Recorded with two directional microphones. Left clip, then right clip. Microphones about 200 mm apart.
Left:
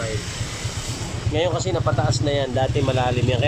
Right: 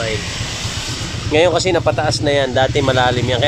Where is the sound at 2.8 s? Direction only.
30° right (ahead or behind).